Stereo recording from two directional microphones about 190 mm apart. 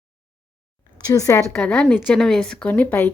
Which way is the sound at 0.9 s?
20° left (ahead or behind).